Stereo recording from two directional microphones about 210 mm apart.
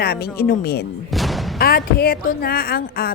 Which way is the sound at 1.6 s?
45° left (ahead or behind).